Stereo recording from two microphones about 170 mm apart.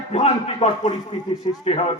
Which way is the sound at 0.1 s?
35° left (ahead or behind).